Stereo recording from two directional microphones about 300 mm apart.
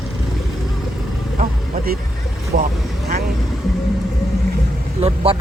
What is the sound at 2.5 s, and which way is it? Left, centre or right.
Speech, right.